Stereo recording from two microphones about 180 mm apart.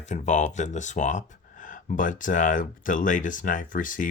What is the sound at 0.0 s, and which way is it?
Speech, 40° left (ahead or behind).